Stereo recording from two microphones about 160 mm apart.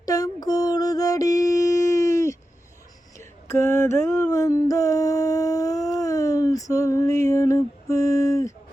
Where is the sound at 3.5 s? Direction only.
15° left (ahead or behind).